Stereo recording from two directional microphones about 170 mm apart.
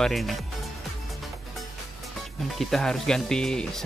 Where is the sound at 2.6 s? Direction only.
Centre (ahead or behind).